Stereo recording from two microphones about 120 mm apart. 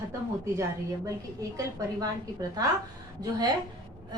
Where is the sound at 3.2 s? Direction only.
35° right (ahead or behind).